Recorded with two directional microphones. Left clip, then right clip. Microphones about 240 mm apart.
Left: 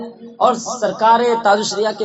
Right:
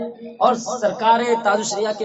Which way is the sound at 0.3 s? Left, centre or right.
Left.